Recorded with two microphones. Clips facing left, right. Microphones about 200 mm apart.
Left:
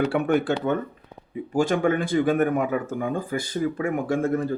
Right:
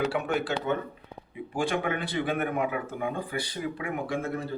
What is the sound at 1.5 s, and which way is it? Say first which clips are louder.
Speech: left 7 dB; 45° left (ahead or behind).